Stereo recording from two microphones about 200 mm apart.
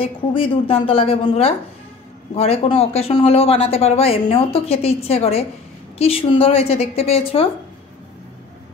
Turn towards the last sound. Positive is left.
turn(degrees=30)  # may be behind; listen again after turning